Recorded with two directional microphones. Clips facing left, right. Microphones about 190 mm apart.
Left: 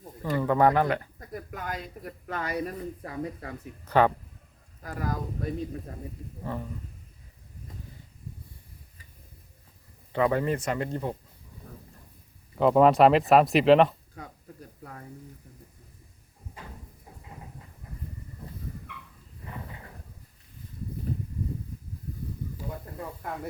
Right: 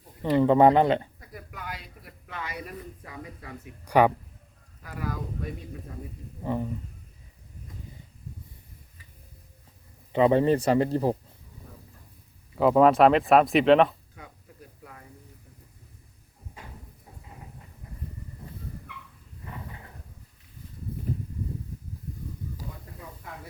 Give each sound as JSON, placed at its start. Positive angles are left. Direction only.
{"t": 0.2, "sound": "speech", "side_deg": -25}
{"t": 1.2, "sound": "speech", "side_deg": 45}
{"t": 3.8, "sound": "speech", "side_deg": -10}
{"t": 4.8, "sound": "speech", "side_deg": 45}
{"t": 6.4, "sound": "speech", "side_deg": -15}
{"t": 10.1, "sound": "speech", "side_deg": -20}
{"t": 12.5, "sound": "speech", "side_deg": 0}
{"t": 23.0, "sound": "snake", "side_deg": 55}